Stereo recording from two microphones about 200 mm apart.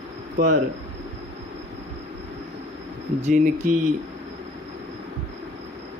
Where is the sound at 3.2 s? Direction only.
35° right (ahead or behind).